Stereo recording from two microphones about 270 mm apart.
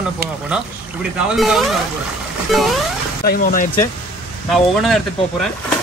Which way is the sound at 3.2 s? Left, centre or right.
Left.